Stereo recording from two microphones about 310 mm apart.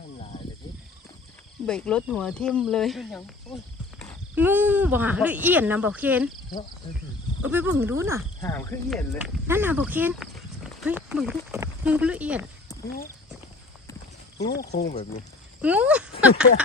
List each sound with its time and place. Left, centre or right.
1.6 s speech: centre
3.9 s a sound: centre
4.4 s speech: centre
7.4 s speech: centre
8.4 s speech: centre
14.3 s speech: left
15.6 s speech: centre